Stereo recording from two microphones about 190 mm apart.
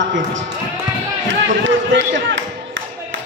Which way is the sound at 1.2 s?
80° right.